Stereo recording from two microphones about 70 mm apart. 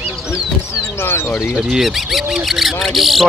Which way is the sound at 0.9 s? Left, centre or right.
Left.